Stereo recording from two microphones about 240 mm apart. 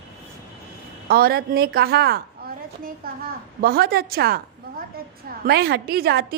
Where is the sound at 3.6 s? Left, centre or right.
Right.